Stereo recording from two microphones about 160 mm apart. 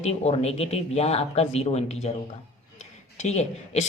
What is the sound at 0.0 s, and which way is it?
Speech, 40° left (ahead or behind).